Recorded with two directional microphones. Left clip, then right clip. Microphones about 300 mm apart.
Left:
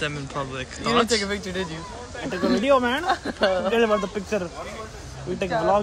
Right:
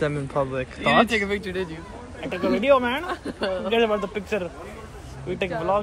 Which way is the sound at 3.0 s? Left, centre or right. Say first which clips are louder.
Left 6 dB; left.